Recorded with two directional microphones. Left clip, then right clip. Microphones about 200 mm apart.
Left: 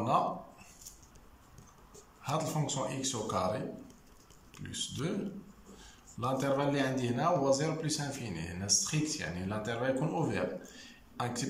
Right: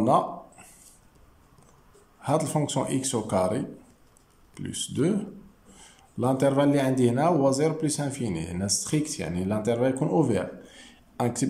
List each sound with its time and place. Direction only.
2.2 s a man's voice: 35° right (ahead or behind)